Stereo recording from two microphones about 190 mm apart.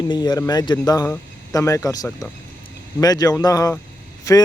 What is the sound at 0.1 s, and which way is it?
Speech, 20° left (ahead or behind).